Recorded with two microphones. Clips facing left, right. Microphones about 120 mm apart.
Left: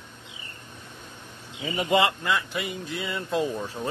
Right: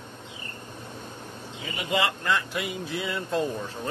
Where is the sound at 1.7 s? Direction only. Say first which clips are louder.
Left 5 dB; 35° left (ahead or behind).